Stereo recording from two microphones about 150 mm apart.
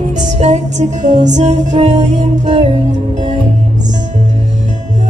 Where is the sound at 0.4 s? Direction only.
50° right (ahead or behind).